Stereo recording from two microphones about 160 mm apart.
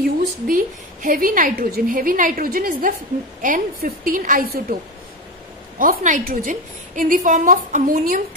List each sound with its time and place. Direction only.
0.0 s a woman's voice: 60° right (ahead or behind)
5.8 s a woman's voice: 55° right (ahead or behind)